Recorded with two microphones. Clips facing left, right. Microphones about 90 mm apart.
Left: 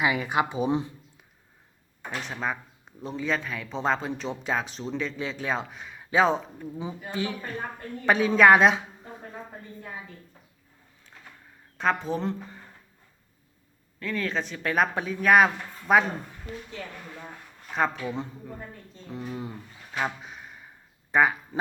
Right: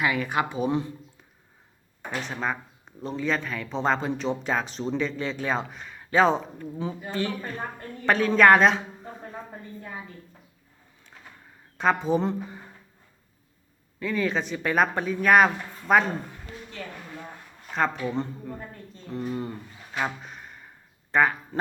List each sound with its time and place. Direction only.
0.0 s speech: 15° left (ahead or behind)
2.2 s speech: centre (ahead or behind)
11.8 s speech: centre (ahead or behind)
14.0 s speech: 5° right (ahead or behind)
17.7 s speech: 5° left (ahead or behind)
21.1 s a sound: 10° left (ahead or behind)